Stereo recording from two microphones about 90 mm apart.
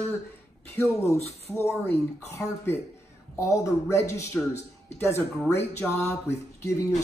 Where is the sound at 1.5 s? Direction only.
30° left (ahead or behind).